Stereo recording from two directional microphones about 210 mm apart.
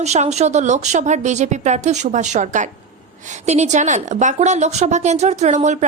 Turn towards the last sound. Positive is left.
turn(degrees=-35)  # may be behind; listen again after turning